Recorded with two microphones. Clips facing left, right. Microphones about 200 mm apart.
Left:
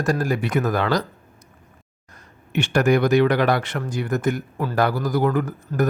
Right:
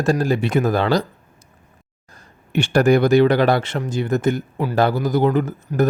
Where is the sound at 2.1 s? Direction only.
30° right (ahead or behind).